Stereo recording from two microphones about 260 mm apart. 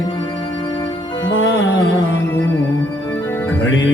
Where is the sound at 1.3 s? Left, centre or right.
Left.